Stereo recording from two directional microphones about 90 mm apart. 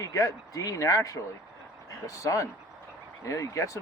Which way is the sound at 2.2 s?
35° left (ahead or behind).